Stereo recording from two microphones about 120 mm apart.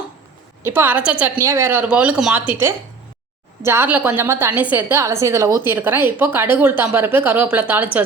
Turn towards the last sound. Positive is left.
turn(degrees=-15)  # may be behind; listen again after turning